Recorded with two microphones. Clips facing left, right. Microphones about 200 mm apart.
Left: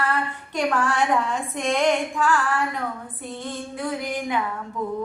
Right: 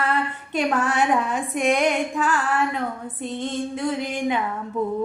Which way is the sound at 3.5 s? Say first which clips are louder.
Right 3 dB; 20° right (ahead or behind).